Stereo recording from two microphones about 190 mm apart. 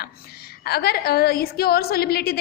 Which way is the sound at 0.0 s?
55° left (ahead or behind).